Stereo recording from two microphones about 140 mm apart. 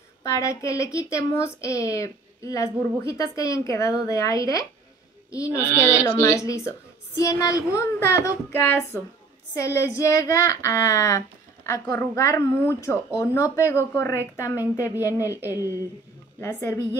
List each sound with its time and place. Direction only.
0.2 s speech: 20° left (ahead or behind)